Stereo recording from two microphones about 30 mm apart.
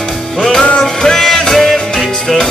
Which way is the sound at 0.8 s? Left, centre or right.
Centre.